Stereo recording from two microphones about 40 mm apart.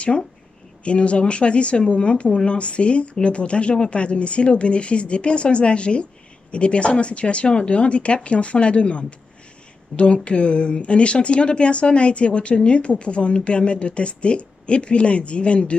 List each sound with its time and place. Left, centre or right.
0.8 s speech: left